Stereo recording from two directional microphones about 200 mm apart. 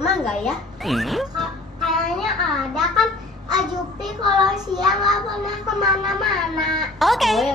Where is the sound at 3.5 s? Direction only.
20° right (ahead or behind).